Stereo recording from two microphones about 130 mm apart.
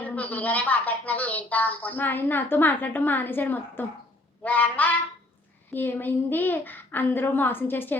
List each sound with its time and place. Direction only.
0.0 s speech: 10° left (ahead or behind)